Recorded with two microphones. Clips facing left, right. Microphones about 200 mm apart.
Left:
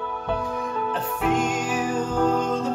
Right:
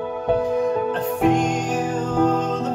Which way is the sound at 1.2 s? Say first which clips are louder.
Right 5 dB; 45° right (ahead or behind).